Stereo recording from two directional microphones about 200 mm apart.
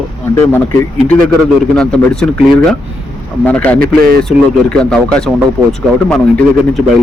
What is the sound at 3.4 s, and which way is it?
Speech, 5° left (ahead or behind).